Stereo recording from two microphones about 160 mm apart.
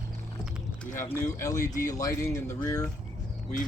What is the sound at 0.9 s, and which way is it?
Speech, 15° left (ahead or behind).